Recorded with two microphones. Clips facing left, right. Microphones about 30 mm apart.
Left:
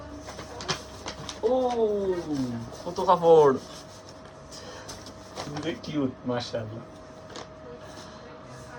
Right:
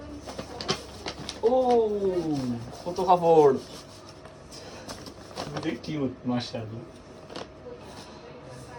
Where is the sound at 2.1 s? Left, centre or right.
Right.